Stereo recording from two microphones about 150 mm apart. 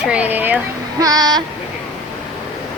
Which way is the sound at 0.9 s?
25° right (ahead or behind).